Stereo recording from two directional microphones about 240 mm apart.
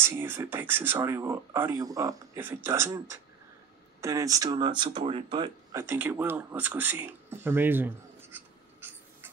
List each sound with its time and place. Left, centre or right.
0.0 s speech: centre